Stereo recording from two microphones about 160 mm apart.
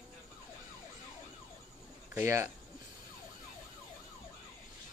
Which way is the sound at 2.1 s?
15° right (ahead or behind).